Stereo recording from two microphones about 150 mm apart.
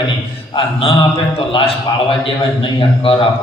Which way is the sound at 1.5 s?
35° left (ahead or behind).